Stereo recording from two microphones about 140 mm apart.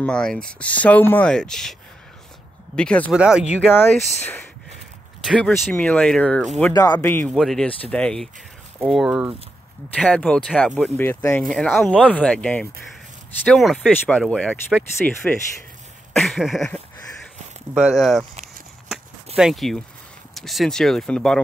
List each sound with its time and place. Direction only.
0.0 s speech: 5° left (ahead or behind)
3.1 s speech: 5° right (ahead or behind)
5.2 s speech: 5° left (ahead or behind)
6.7 s speech: 30° left (ahead or behind)
7.0 s speech: 15° left (ahead or behind)
7.3 s speech: centre (ahead or behind)
9.9 s speech: 5° left (ahead or behind)
19.3 s speech: centre (ahead or behind)